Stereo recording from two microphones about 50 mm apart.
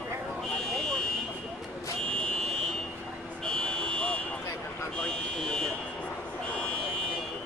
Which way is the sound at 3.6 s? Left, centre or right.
Left.